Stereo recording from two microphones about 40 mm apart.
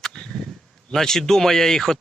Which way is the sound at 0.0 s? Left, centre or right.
Centre.